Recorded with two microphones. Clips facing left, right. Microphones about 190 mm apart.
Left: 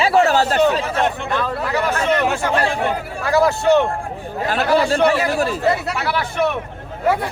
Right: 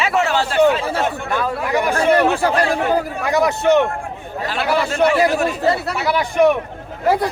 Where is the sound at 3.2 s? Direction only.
20° right (ahead or behind).